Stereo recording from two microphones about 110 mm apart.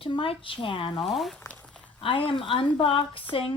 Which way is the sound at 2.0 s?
50° left (ahead or behind).